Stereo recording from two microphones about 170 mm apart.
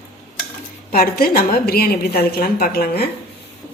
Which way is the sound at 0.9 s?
60° left (ahead or behind).